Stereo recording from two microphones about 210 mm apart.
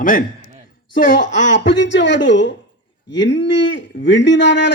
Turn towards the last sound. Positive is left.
turn(degrees=60)  # may be behind; listen again after turning